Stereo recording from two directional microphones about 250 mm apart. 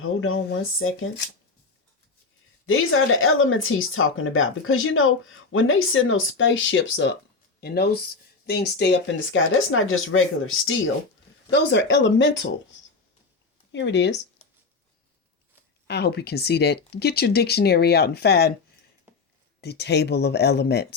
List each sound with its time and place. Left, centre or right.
0.0 s speech: left
2.6 s speech: left
13.7 s speech: left
14.4 s writing: left
15.9 s speech: left
19.6 s speech: left